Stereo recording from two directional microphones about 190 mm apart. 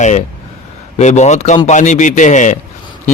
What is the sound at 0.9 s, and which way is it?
Music, 35° left (ahead or behind).